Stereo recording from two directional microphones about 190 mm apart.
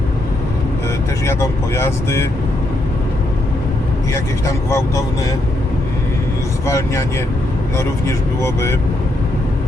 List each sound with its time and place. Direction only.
1.2 s speech: 15° left (ahead or behind)
4.1 s speech: 15° left (ahead or behind)
6.7 s speech: 15° left (ahead or behind)